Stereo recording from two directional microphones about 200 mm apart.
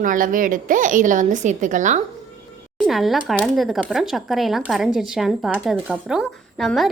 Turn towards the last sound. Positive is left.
turn(degrees=0)  # may be behind; listen again after turning